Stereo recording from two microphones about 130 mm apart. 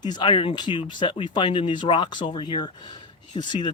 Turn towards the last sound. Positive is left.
turn(degrees=35)  # may be behind; listen again after turning